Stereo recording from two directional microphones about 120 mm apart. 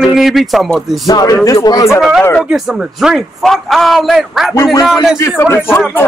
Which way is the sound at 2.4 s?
5° right (ahead or behind).